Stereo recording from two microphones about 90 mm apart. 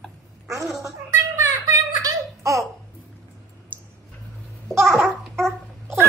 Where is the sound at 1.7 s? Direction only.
35° right (ahead or behind).